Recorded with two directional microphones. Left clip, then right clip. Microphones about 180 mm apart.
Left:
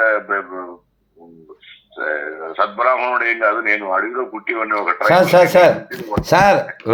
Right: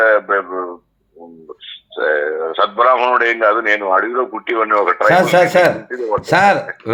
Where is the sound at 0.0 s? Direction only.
25° right (ahead or behind).